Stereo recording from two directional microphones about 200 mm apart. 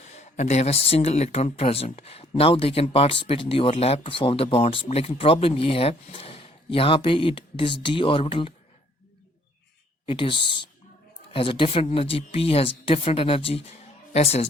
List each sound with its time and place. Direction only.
0.0 s speech: 35° left (ahead or behind)
10.1 s speech: 25° left (ahead or behind)